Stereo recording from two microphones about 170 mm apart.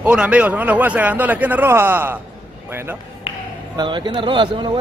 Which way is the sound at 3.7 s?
25° right (ahead or behind).